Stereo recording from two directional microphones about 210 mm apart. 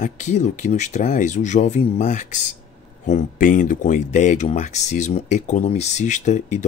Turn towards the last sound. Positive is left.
turn(degrees=35)  # may be behind; listen again after turning